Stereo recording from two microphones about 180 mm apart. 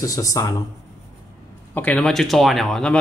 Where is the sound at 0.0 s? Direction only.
20° left (ahead or behind).